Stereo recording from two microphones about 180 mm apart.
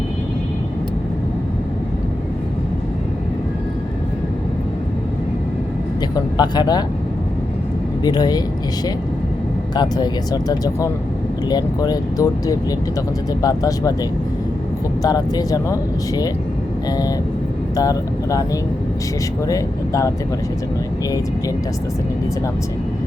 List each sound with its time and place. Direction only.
6.0 s speech: 25° left (ahead or behind)
8.0 s speech: 20° left (ahead or behind)
9.7 s speech: 20° left (ahead or behind)
15.0 s speech: 20° left (ahead or behind)
17.7 s speech: 20° left (ahead or behind)
19.5 s speech: 20° left (ahead or behind)